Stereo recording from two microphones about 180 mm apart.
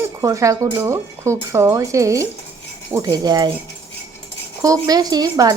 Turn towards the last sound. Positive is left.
turn(degrees=-20)  # may be behind; listen again after turning